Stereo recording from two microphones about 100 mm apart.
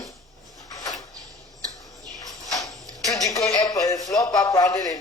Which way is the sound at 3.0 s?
35° left (ahead or behind).